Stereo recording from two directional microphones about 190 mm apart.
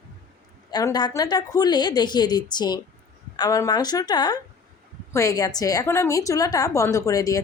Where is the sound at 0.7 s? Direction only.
20° left (ahead or behind).